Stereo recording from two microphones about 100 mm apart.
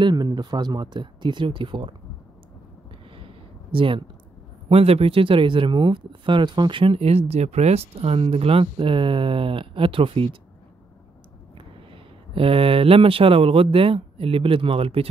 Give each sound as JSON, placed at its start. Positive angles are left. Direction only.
{"t": 0.0, "sound": "speech", "side_deg": -45}
{"t": 3.2, "sound": "a sound", "side_deg": -60}
{"t": 4.6, "sound": "speech", "side_deg": -85}
{"t": 11.5, "sound": "speech", "side_deg": -65}